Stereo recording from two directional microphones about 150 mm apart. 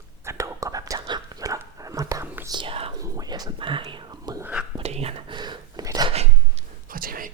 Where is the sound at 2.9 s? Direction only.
25° right (ahead or behind).